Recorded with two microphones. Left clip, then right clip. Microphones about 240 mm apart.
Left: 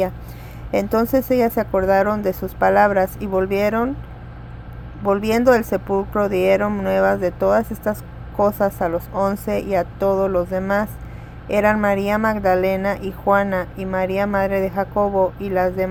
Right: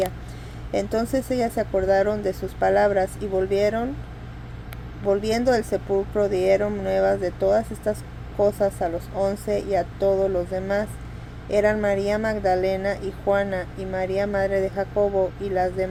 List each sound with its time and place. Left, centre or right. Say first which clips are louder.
0.7 s speech: left 6 dB; left
5.0 s speech: left 5 dB; left